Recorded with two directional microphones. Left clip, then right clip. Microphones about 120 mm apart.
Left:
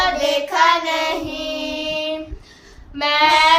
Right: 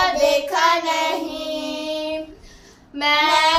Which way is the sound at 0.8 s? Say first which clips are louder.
Even; 35° left (ahead or behind).